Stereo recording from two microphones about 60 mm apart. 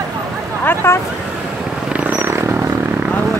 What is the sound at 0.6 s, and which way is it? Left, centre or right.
Speech, left.